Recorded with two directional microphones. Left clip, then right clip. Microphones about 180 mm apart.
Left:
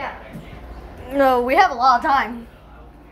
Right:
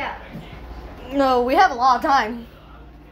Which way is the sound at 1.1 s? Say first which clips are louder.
Left 2 dB; centre (ahead or behind).